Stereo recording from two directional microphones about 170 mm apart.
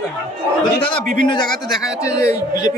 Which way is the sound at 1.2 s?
25° left (ahead or behind).